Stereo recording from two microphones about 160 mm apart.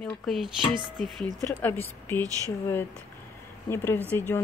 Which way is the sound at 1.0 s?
10° left (ahead or behind).